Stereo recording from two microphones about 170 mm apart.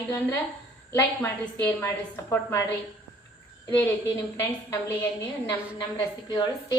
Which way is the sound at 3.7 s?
10° left (ahead or behind).